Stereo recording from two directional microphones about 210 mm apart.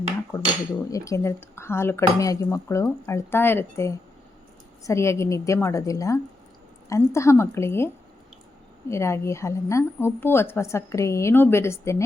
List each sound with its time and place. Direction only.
0.3 s a woman's voice: 15° left (ahead or behind)
8.9 s a woman's voice: 10° left (ahead or behind)